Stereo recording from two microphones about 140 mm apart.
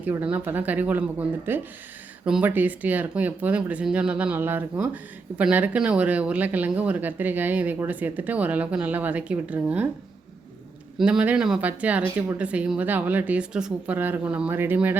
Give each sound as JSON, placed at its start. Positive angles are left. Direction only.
{"t": 0.0, "sound": "speech", "side_deg": -10}
{"t": 10.9, "sound": "speech", "side_deg": -5}